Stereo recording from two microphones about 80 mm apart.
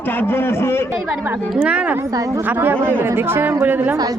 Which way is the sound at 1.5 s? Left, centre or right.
Centre.